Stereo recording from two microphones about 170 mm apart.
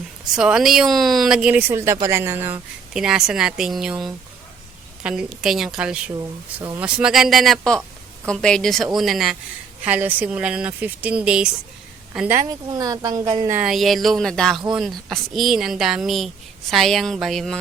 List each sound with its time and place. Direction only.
0.3 s speech: 5° right (ahead or behind)
2.9 s speech: 5° right (ahead or behind)
6.1 s a woman's voice: 25° right (ahead or behind)
6.7 s speech: 5° right (ahead or behind)
12.7 s a woman's voice: 20° right (ahead or behind)
13.6 s speech: centre (ahead or behind)